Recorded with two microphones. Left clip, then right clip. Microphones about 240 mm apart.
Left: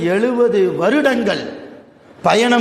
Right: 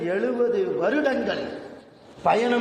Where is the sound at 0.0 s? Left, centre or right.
Left.